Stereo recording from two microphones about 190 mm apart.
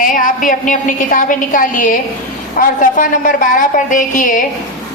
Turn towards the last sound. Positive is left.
turn(degrees=45)  # may be behind; listen again after turning